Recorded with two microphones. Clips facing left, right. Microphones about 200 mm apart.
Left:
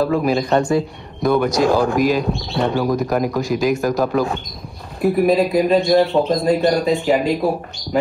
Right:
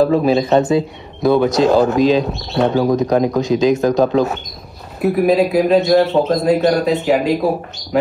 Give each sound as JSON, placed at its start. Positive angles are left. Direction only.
{"t": 0.2, "sound": "speech", "side_deg": -20}
{"t": 5.0, "sound": "speech", "side_deg": 0}